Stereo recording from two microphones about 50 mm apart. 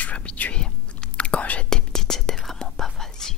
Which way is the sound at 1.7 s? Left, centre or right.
Centre.